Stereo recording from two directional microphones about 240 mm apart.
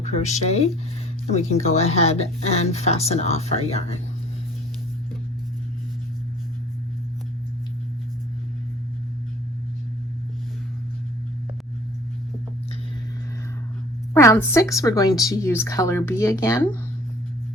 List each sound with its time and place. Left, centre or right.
0.0 s speech: left
14.1 s speech: centre